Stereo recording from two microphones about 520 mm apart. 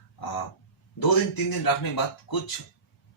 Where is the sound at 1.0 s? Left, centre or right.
Left.